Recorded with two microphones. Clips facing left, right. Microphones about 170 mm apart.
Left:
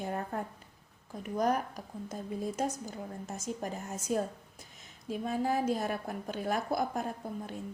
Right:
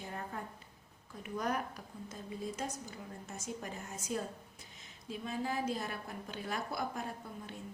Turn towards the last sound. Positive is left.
turn(degrees=45)  # may be behind; listen again after turning